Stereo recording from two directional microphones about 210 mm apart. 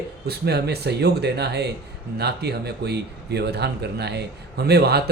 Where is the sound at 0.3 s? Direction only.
50° right (ahead or behind).